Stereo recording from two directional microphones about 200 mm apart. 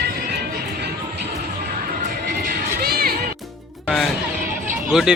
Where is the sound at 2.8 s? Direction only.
50° right (ahead or behind).